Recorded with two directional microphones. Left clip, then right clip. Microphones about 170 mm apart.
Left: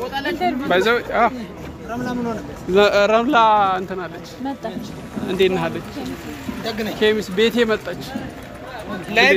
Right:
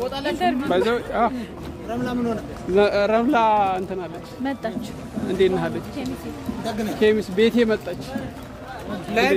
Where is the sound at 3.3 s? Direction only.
15° right (ahead or behind).